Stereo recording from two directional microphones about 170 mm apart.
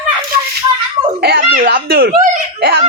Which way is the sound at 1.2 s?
75° right (ahead or behind).